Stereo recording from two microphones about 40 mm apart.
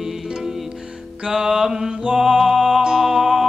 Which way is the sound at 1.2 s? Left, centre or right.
Centre.